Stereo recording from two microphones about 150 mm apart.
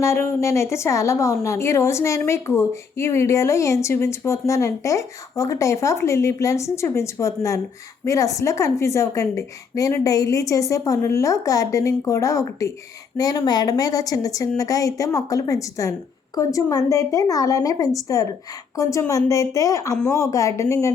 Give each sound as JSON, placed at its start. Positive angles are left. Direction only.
{"t": 0.0, "sound": "a woman's voice", "side_deg": 20}